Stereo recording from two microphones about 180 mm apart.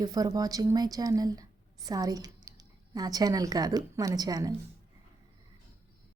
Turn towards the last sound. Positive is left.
turn(degrees=-20)  # may be behind; listen again after turning